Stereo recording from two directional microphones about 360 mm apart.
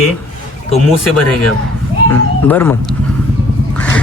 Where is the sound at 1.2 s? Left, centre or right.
Left.